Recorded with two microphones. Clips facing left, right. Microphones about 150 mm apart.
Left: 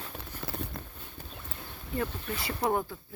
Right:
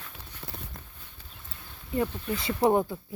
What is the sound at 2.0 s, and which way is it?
Speech, 20° right (ahead or behind).